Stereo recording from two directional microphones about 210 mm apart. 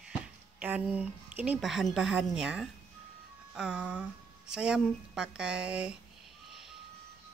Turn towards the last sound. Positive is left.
turn(degrees=-5)  # may be behind; listen again after turning